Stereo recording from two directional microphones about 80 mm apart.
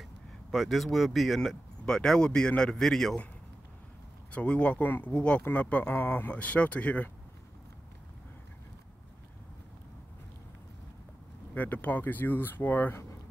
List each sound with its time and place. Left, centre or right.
0.5 s speech: centre
4.3 s speech: centre
11.5 s speech: centre